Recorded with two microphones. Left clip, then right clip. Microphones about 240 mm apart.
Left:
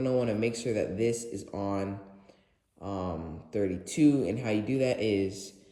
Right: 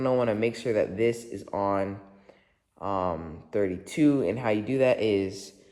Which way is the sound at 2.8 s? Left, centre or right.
Right.